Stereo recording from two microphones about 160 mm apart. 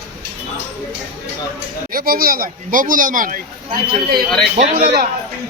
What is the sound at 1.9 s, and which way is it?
A man's voice, 65° right (ahead or behind).